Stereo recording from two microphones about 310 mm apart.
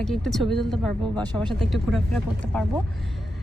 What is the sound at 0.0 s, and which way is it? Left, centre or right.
Speech, centre.